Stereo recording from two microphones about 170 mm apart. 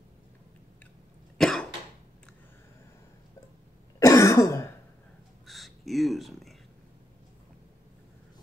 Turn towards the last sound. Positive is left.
turn(degrees=0)  # may be behind; listen again after turning